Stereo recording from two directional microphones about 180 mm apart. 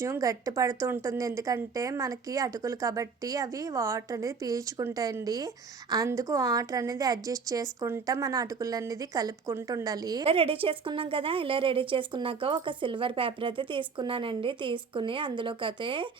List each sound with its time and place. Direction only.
0.0 s a woman's voice: 15° right (ahead or behind)
10.2 s a woman's voice: 30° right (ahead or behind)